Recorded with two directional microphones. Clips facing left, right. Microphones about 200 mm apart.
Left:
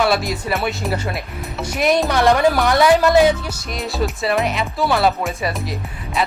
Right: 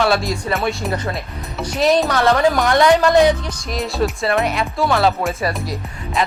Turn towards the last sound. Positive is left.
turn(degrees=0)  # may be behind; listen again after turning